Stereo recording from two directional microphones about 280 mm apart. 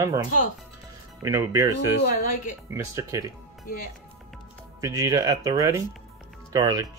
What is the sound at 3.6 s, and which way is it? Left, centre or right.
Speech, left.